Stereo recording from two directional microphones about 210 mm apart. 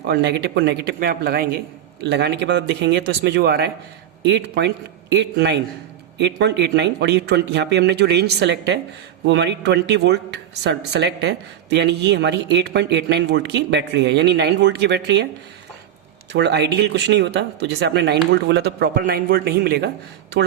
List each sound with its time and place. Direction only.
0.1 s a woman's voice: 55° right (ahead or behind)
16.3 s a woman's voice: 55° right (ahead or behind)